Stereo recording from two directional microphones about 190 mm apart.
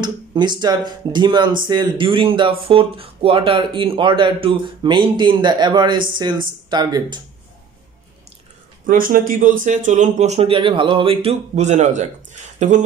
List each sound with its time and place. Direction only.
0.0 s speech: 25° right (ahead or behind)
8.8 s speech: 45° right (ahead or behind)